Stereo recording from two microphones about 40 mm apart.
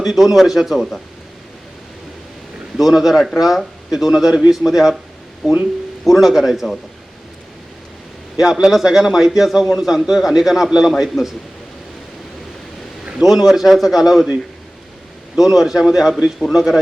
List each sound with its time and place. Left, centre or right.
0.0 s a man's voice: centre
2.7 s a man's voice: centre
5.4 s a man's voice: centre
8.7 s a man's voice: centre
11.0 s a man's voice: centre
13.2 s a man's voice: centre
15.4 s a man's voice: centre